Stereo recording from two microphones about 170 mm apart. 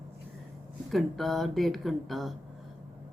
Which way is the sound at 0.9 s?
Centre (ahead or behind).